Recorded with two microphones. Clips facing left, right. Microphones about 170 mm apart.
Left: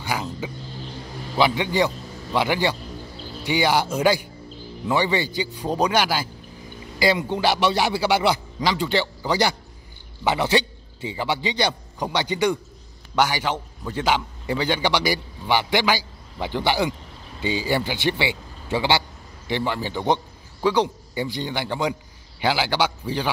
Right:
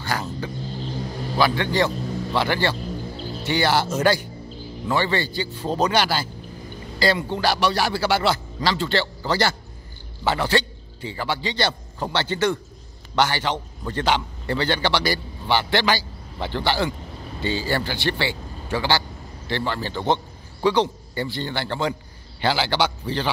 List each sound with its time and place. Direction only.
0.0 s a man's voice: 10° left (ahead or behind)